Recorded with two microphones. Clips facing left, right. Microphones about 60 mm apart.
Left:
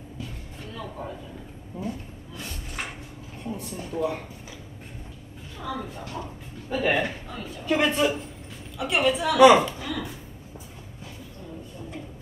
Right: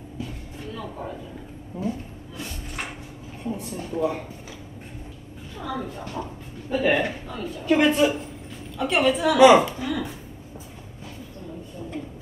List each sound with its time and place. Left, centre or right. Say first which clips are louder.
1.7 s speech: right 4 dB; centre
3.5 s a sound: right 1 dB; centre
5.6 s a woman's voice: right 2 dB; centre